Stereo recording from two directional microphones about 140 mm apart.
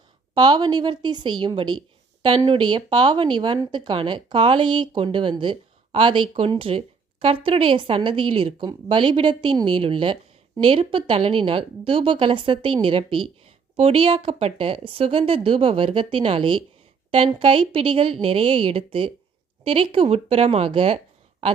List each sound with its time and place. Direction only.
0.3 s a woman's voice: 30° right (ahead or behind)